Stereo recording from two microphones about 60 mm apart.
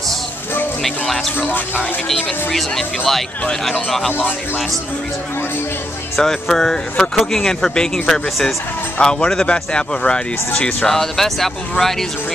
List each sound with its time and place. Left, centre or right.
0.8 s speech: centre
6.1 s speech: centre